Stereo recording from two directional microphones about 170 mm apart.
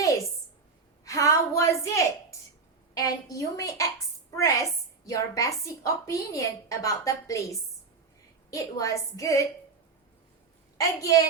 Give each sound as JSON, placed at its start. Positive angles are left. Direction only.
{"t": 1.0, "sound": "a sound", "side_deg": 20}
{"t": 2.9, "sound": "a woman's voice", "side_deg": 20}
{"t": 10.8, "sound": "a woman's voice", "side_deg": 20}